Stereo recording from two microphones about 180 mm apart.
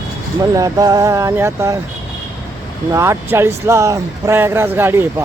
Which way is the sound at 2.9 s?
15° right (ahead or behind).